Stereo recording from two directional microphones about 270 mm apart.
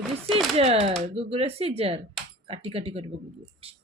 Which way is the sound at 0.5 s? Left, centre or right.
Right.